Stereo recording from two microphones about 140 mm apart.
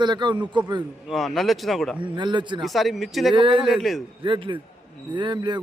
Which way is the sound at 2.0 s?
35° right (ahead or behind).